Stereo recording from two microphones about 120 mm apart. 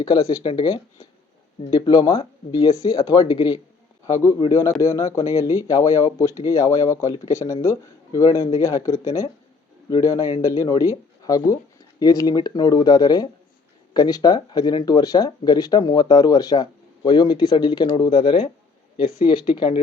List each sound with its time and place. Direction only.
0.0 s speech: 30° left (ahead or behind)
4.0 s speech: 25° left (ahead or behind); by 19.8 s 45° left (ahead or behind)